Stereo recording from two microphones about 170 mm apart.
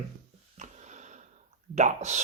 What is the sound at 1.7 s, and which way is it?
Speech, 45° right (ahead or behind).